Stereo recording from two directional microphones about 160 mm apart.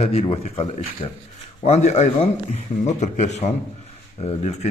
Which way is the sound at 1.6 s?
45° left (ahead or behind).